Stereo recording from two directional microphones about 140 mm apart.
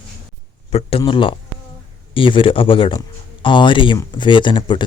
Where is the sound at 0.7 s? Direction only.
45° left (ahead or behind).